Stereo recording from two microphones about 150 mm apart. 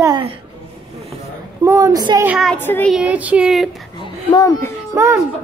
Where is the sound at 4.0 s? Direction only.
30° left (ahead or behind).